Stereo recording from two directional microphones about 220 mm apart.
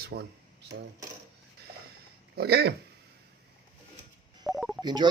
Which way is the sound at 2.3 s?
50° right (ahead or behind).